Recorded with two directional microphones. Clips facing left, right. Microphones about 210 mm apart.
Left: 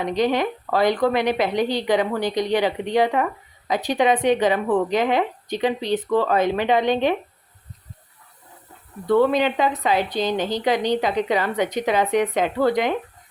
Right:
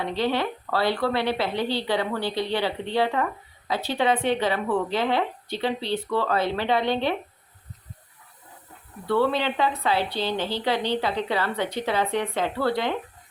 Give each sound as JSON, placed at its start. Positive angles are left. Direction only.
{"t": 0.0, "sound": "a woman's voice", "side_deg": 15}
{"t": 9.2, "sound": "a woman's voice", "side_deg": 15}